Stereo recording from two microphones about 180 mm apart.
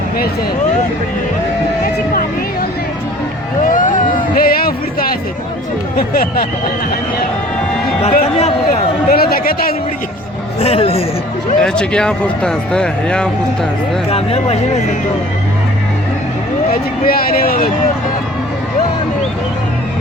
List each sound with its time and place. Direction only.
3.7 s vehicle: 45° left (ahead or behind)
4.4 s a sound: 55° left (ahead or behind)
6.0 s a man's voice: 55° left (ahead or behind)
8.1 s speech: 40° left (ahead or behind)
9.0 s a man's voice: 55° left (ahead or behind)
10.6 s speech: 35° left (ahead or behind)
11.6 s speech: 5° left (ahead or behind)
14.1 s speech: 35° left (ahead or behind)
17.1 s a man's voice: 55° left (ahead or behind)